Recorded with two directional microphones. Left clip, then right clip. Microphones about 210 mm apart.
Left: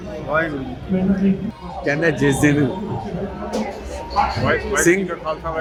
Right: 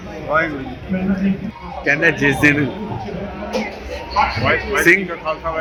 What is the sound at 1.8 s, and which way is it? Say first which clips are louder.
Speech: right 4 dB; 15° left (ahead or behind).